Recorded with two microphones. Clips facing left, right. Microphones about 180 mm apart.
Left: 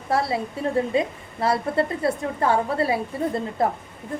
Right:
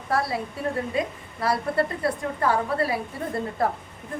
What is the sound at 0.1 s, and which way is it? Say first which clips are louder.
A woman's voice: left 3 dB; 25° left (ahead or behind).